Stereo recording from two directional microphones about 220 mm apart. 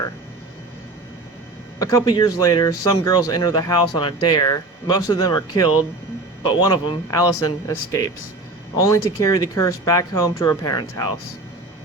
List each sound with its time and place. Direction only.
1.8 s speech: 15° left (ahead or behind)